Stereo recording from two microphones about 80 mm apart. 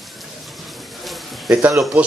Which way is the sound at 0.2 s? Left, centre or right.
Centre.